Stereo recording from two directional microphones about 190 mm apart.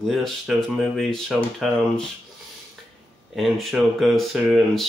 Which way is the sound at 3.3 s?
Centre (ahead or behind).